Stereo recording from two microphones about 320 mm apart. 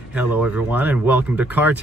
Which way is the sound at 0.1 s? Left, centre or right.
Centre.